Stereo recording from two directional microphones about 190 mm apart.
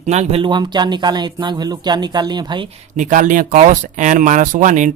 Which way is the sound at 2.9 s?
40° right (ahead or behind).